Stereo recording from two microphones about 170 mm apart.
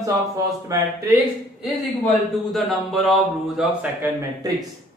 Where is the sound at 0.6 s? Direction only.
20° right (ahead or behind).